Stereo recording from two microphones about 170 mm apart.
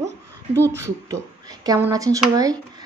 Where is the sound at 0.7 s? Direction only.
15° right (ahead or behind).